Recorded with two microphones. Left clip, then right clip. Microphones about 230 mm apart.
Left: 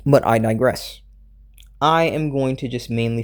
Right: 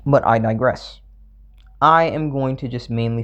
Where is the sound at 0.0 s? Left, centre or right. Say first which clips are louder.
Even; left.